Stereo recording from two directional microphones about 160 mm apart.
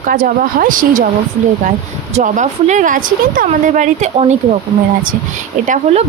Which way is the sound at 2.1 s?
50° right (ahead or behind).